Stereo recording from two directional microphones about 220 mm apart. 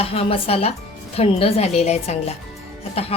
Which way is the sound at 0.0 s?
25° left (ahead or behind).